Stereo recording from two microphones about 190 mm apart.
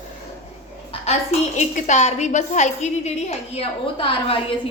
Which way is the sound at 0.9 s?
30° left (ahead or behind).